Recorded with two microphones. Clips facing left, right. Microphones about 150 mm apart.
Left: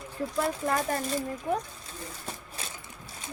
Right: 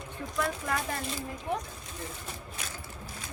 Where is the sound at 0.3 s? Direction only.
35° left (ahead or behind).